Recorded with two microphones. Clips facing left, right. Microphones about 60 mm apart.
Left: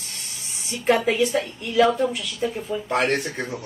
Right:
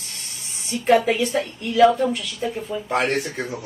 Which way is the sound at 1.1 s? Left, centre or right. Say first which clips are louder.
Left 1 dB; centre.